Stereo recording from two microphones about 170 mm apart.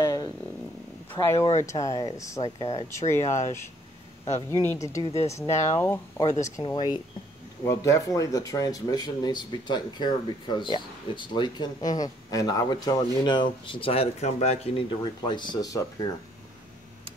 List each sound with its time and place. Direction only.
0.0 s a sound: 20° left (ahead or behind)
1.2 s speech: 15° left (ahead or behind)
5.1 s speech: 40° left (ahead or behind)
5.8 s speech: 20° left (ahead or behind)